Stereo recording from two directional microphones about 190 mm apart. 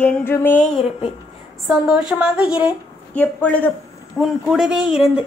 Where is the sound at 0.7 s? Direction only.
30° left (ahead or behind).